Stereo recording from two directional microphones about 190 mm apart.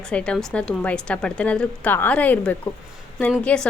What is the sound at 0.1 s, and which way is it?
A woman's voice, 5° left (ahead or behind).